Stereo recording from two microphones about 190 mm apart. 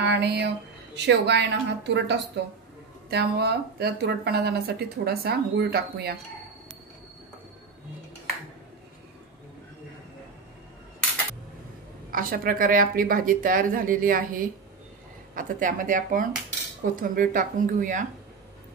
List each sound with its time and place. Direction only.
0.0 s speech: 60° right (ahead or behind)
12.1 s a woman's voice: 50° right (ahead or behind)